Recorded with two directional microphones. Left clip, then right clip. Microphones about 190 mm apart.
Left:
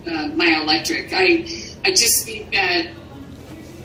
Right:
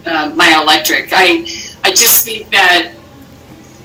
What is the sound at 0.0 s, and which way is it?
A woman's voice, 40° right (ahead or behind).